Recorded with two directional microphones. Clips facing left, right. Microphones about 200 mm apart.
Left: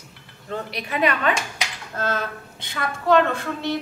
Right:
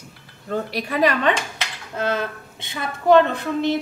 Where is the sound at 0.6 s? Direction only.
35° right (ahead or behind).